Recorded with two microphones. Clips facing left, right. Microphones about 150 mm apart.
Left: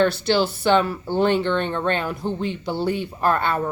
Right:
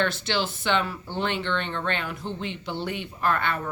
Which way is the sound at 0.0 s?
40° left (ahead or behind).